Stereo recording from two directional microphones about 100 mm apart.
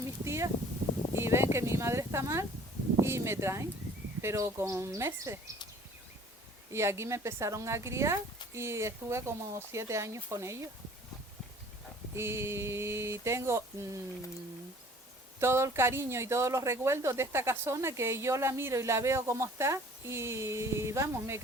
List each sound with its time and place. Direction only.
0.3 s a sound: 30° right (ahead or behind)
3.0 s speech: 25° right (ahead or behind)
6.7 s speech: 25° right (ahead or behind)
12.1 s speech: 25° right (ahead or behind)
15.4 s speech: 25° right (ahead or behind)